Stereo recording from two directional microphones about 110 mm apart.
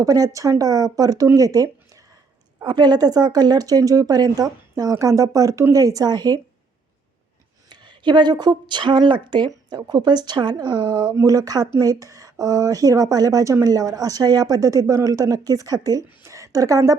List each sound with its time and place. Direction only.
0.0 s a woman's voice: 30° right (ahead or behind)
2.6 s a woman's voice: 40° right (ahead or behind)
7.7 s a woman's voice: 45° right (ahead or behind)
16.2 s a sound: 30° right (ahead or behind)